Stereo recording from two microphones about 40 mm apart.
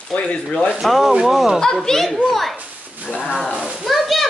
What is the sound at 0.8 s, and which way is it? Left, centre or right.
Speech, centre.